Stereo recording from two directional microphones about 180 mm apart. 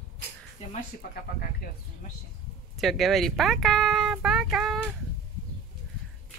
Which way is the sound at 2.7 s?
Centre (ahead or behind).